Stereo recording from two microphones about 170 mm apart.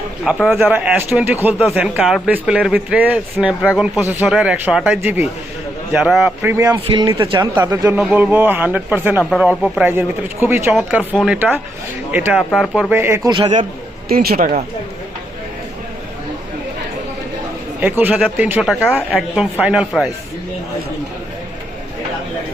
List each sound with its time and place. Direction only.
0.5 s speech: 10° right (ahead or behind)
6.4 s a man's voice: 15° right (ahead or behind)
9.8 s speech: 10° right (ahead or behind)
10.8 s speech: centre (ahead or behind)
12.4 s speech: centre (ahead or behind)
12.9 s speech: 15° right (ahead or behind)
14.1 s speech: 65° right (ahead or behind)
17.7 s speech: 10° right (ahead or behind)
18.6 s speech: centre (ahead or behind)